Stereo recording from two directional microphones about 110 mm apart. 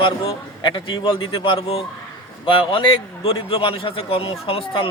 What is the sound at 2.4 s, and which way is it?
A man's voice, 50° left (ahead or behind).